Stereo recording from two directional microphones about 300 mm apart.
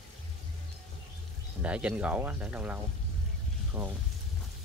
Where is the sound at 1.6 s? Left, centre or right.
Centre.